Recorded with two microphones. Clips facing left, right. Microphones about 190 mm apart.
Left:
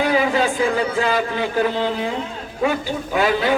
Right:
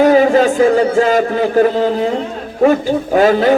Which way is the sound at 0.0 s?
45° right (ahead or behind).